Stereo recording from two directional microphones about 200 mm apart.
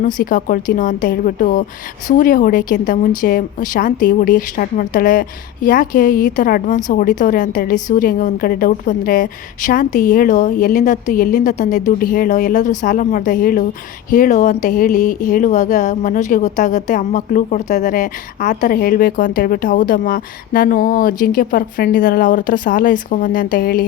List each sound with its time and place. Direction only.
0.0 s speech: 45° left (ahead or behind)